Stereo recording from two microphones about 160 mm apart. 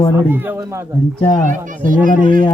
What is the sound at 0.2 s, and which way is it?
Speech, 15° right (ahead or behind).